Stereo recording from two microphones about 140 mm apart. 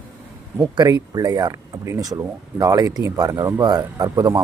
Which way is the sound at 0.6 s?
30° right (ahead or behind).